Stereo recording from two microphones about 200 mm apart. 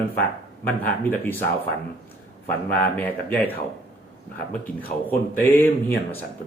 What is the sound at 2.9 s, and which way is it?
Speech, 10° left (ahead or behind).